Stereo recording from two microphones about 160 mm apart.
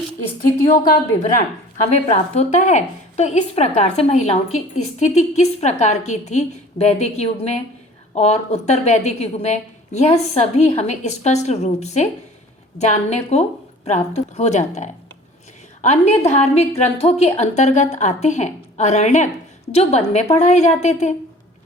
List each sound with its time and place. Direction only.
2.0 s a woman's voice: 45° left (ahead or behind)